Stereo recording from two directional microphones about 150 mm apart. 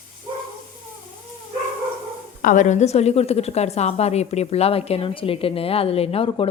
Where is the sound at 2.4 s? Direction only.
60° left (ahead or behind).